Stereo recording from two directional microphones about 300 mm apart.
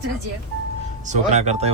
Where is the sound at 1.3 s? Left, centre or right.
Right.